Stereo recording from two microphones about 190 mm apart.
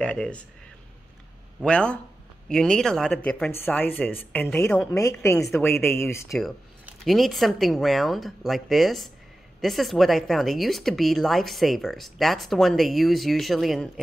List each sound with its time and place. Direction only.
0.0 s speech: 5° left (ahead or behind)
1.6 s a woman's voice: 5° left (ahead or behind)
6.3 s speech: centre (ahead or behind)